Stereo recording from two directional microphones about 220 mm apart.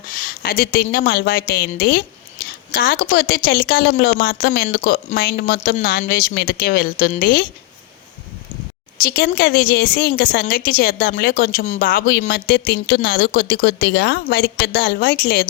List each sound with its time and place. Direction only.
0.1 s a woman's voice: 40° left (ahead or behind)
5.5 s a woman's voice: 30° left (ahead or behind)
5.8 s a woman's voice: 45° left (ahead or behind)
9.0 s a woman's voice: 45° left (ahead or behind)